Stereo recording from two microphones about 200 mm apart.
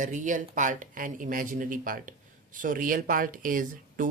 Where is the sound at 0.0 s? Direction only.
40° right (ahead or behind).